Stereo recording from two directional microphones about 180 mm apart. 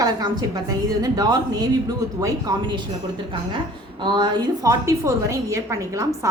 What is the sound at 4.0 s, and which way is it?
A woman's voice, 25° right (ahead or behind).